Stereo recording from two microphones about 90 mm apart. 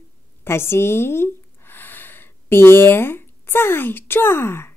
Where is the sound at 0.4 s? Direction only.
30° left (ahead or behind).